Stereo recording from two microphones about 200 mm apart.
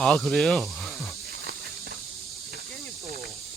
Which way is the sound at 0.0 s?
Centre (ahead or behind).